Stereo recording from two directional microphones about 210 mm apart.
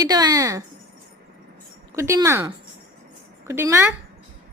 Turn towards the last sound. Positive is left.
turn(degrees=-10)  # may be behind; listen again after turning